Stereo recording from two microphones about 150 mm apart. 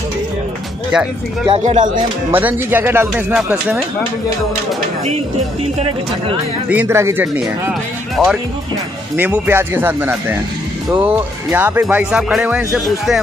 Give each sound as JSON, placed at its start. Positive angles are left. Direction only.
{"t": 0.9, "sound": "speech", "side_deg": -5}
{"t": 1.6, "sound": "speech", "side_deg": -55}
{"t": 2.3, "sound": "speech", "side_deg": -15}
{"t": 6.7, "sound": "speech", "side_deg": -15}
{"t": 8.2, "sound": "speech", "side_deg": 0}
{"t": 9.1, "sound": "speech", "side_deg": -10}